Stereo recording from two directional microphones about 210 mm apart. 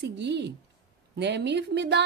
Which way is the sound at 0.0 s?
55° right (ahead or behind).